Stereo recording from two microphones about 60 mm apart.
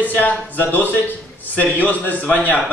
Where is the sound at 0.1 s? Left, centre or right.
Left.